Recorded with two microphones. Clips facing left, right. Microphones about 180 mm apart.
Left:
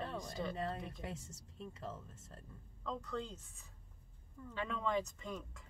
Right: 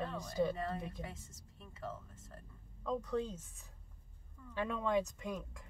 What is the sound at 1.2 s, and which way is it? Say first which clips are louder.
Speech: left 7 dB; 25° left (ahead or behind).